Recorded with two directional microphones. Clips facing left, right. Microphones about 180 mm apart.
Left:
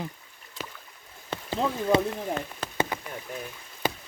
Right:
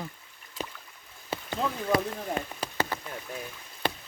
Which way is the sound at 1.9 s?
25° left (ahead or behind).